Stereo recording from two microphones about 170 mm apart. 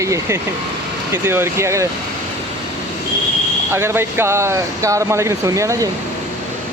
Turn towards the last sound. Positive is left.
turn(degrees=-20)  # may be behind; listen again after turning